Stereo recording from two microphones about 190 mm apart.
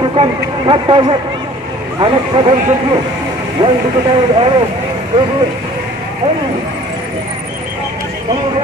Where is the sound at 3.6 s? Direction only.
25° right (ahead or behind).